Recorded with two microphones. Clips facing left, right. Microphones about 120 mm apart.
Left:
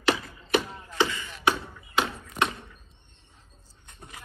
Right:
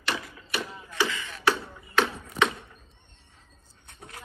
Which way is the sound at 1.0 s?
20° left (ahead or behind).